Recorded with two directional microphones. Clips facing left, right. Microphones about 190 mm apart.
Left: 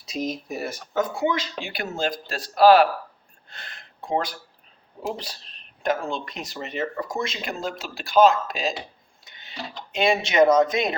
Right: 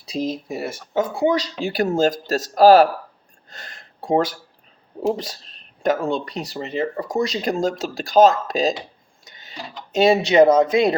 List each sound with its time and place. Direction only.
0.0 s speech: 30° right (ahead or behind)
3.5 s a sound: 40° right (ahead or behind)
5.0 s speech: 40° right (ahead or behind)